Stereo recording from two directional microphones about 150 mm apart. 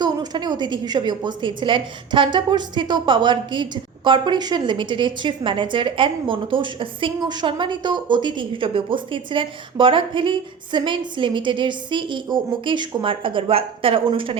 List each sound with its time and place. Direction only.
0.0 s a woman's voice: 30° right (ahead or behind)